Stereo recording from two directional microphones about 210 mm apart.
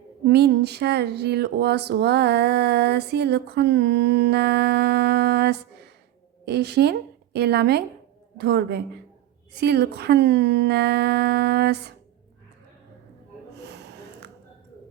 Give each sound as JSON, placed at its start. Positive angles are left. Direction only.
{"t": 0.3, "sound": "speech", "side_deg": -50}
{"t": 13.6, "sound": "snort", "side_deg": -55}